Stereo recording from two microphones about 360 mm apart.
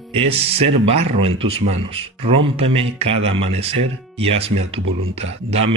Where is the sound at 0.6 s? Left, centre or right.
Centre.